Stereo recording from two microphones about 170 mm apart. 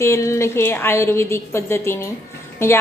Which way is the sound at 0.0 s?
15° left (ahead or behind).